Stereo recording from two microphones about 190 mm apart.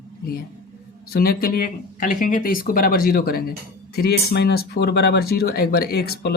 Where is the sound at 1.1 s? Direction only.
55° left (ahead or behind).